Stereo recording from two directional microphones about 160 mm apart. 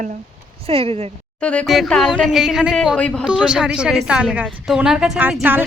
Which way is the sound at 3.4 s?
5° right (ahead or behind).